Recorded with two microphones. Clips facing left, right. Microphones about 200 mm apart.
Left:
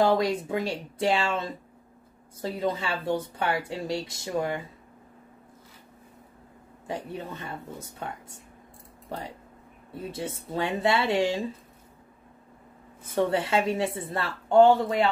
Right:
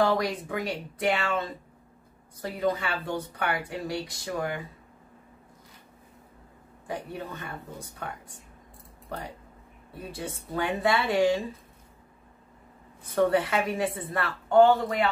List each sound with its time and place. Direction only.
0.0 s speech: 25° left (ahead or behind)
6.9 s speech: 25° left (ahead or behind)
10.1 s speech: 25° left (ahead or behind)
13.0 s speech: 25° left (ahead or behind)